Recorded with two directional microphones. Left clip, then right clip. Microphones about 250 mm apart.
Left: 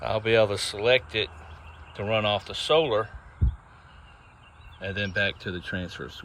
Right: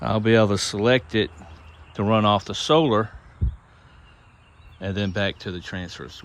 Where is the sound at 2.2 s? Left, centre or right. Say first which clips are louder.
Right 5 dB; centre.